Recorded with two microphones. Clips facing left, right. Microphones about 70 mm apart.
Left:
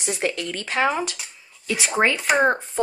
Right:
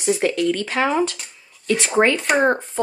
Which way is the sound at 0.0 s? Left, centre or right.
Centre.